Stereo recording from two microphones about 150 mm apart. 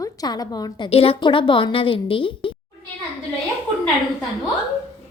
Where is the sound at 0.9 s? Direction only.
40° left (ahead or behind).